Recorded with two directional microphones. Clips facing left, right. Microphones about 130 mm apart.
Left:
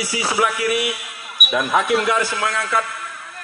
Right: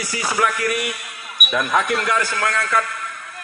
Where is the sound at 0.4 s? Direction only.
5° left (ahead or behind).